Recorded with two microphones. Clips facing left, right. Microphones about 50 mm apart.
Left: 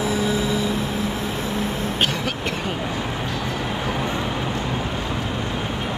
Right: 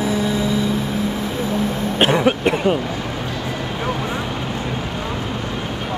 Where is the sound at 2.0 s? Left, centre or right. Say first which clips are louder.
Right 11 dB; right.